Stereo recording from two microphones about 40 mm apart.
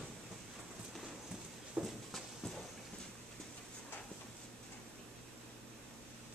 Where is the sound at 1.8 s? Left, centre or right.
Right.